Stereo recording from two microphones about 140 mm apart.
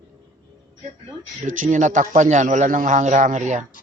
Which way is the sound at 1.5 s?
70° right (ahead or behind).